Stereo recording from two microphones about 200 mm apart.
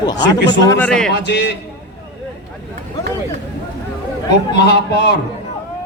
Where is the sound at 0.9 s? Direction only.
5° left (ahead or behind).